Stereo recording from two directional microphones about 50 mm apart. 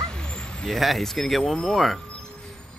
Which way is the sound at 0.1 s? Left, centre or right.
Centre.